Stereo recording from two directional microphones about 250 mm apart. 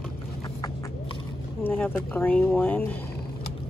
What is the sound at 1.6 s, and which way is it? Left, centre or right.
Speech, centre.